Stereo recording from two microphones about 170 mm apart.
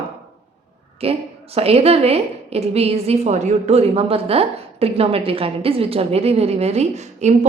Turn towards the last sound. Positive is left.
turn(degrees=-40)  # may be behind; listen again after turning